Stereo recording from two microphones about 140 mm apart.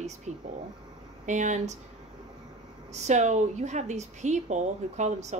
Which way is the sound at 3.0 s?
55° right (ahead or behind).